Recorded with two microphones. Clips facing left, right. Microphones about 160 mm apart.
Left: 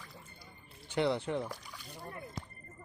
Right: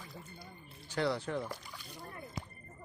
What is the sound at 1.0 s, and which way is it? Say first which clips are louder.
Speech: left 2 dB; 20° left (ahead or behind).